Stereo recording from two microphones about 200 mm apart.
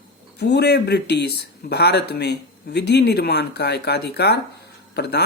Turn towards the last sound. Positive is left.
turn(degrees=55)  # may be behind; listen again after turning